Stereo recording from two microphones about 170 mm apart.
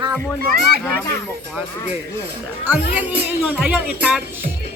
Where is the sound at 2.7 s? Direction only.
10° right (ahead or behind).